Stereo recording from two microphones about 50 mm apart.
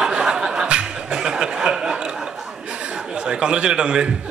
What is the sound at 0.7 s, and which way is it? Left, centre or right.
Chuckle, centre.